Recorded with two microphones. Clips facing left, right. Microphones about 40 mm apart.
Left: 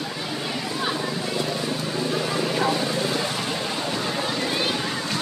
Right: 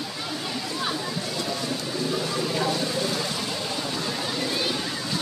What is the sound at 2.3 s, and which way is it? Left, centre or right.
Vehicle, left.